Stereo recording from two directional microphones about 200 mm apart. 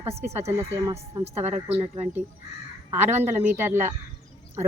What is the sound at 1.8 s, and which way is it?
Speech, 35° right (ahead or behind).